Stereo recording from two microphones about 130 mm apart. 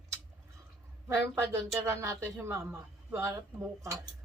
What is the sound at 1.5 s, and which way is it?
Speech, 20° right (ahead or behind).